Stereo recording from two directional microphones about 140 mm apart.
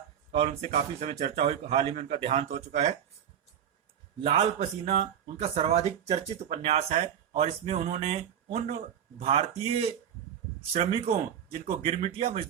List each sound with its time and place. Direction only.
0.3 s speech: 50° right (ahead or behind)
4.2 s speech: 45° right (ahead or behind)